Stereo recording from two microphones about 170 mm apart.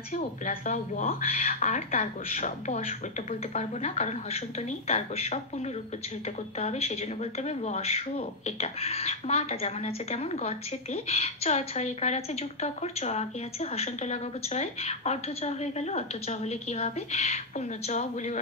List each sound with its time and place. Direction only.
0.1 s speech: 50° left (ahead or behind)
6.6 s speech: 40° left (ahead or behind)